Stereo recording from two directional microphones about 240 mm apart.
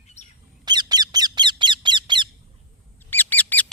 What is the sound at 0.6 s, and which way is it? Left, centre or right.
Bird, centre.